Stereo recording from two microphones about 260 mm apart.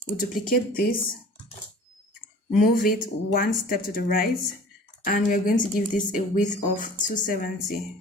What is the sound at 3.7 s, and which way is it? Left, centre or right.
Speech, left.